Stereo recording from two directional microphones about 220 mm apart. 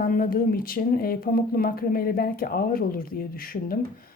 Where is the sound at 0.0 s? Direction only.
40° left (ahead or behind).